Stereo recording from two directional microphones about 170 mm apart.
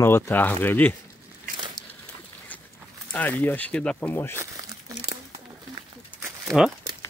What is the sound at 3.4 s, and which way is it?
Speech, 10° left (ahead or behind).